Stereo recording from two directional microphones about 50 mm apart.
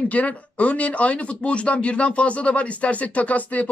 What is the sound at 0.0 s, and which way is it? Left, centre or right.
Speech, left.